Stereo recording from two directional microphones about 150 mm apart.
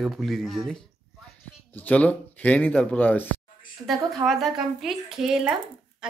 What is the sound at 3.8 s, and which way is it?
Speech, 20° right (ahead or behind).